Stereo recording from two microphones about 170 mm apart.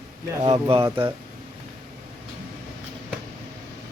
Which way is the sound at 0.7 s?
30° right (ahead or behind).